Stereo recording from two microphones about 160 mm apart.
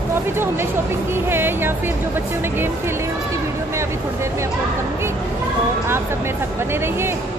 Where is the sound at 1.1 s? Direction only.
15° right (ahead or behind).